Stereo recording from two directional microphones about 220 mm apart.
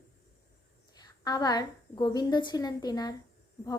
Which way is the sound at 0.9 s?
20° left (ahead or behind).